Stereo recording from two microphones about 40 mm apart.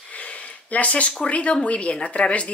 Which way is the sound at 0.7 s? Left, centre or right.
Left.